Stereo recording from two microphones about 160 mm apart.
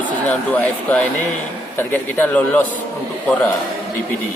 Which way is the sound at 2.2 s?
10° left (ahead or behind).